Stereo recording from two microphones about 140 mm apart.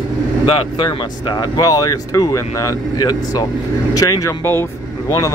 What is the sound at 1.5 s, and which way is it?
Speech, 25° left (ahead or behind).